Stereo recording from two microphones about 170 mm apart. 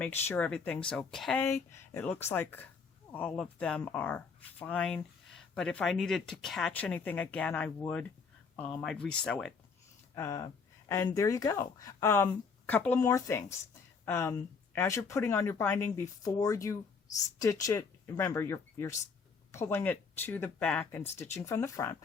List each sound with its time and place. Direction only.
0.0 s speech: 10° left (ahead or behind)
1.5 s speech: 15° left (ahead or behind)
10.2 s speech: 20° left (ahead or behind)